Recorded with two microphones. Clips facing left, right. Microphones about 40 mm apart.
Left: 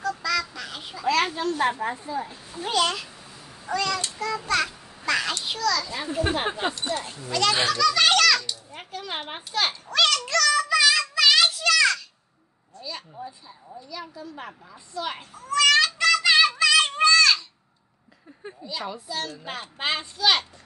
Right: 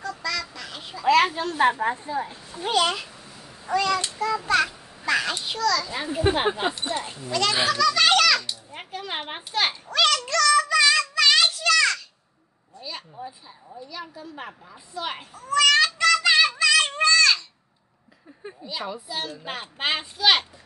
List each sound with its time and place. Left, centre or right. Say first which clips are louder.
0.2 s duck: left 3 dB; centre
1.8 s a woman's voice: right 4 dB; right
2.0 s speech: right 2 dB; right
2.3 s a child's voice: right 1 dB; centre
3.3 s babbling: right 2 dB; centre
4.2 s a child's voice: right 2 dB; centre
9.8 s child singing: left 1 dB; centre
12.7 s a sound: even; centre
13.7 s a child's voice: even; centre
15.3 s child singing: right 1 dB; centre
18.6 s a child's voice: right 1 dB; centre